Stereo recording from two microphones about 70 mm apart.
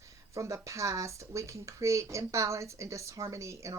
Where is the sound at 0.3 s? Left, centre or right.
Right.